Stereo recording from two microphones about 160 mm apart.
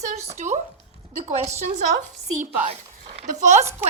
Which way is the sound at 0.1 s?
45° right (ahead or behind).